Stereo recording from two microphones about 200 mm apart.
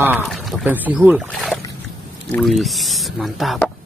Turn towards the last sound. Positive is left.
turn(degrees=0)  # may be behind; listen again after turning